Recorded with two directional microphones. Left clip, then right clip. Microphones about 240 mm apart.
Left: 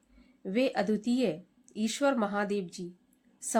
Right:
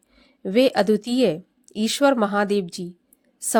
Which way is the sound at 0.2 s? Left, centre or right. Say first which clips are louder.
Right 11 dB; right.